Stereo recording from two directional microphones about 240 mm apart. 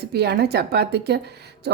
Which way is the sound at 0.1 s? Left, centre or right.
Right.